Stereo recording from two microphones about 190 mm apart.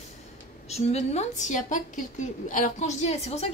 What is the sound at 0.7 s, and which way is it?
A woman's voice, 35° left (ahead or behind).